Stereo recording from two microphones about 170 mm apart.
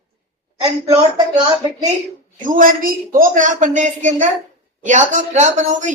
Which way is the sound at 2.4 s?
55° right (ahead or behind).